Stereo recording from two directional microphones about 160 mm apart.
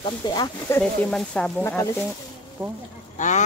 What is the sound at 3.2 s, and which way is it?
Speech, 50° left (ahead or behind).